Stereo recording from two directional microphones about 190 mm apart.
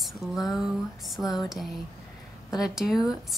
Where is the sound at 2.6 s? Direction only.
Centre (ahead or behind).